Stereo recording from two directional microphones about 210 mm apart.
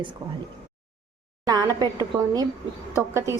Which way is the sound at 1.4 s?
15° right (ahead or behind).